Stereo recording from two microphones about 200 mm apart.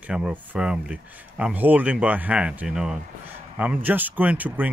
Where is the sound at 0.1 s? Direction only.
5° right (ahead or behind).